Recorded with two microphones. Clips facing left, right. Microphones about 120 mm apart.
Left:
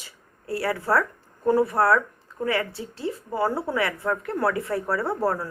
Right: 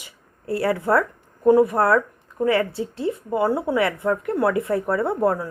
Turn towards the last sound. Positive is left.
turn(degrees=-20)  # may be behind; listen again after turning